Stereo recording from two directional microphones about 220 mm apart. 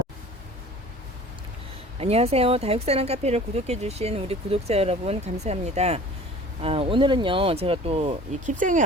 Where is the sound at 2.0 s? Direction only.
25° right (ahead or behind).